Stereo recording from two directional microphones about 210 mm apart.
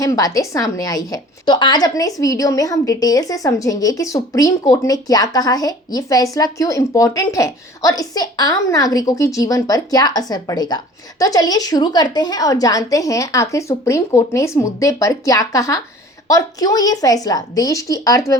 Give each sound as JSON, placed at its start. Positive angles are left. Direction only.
{"t": 0.0, "sound": "a woman's voice", "side_deg": 15}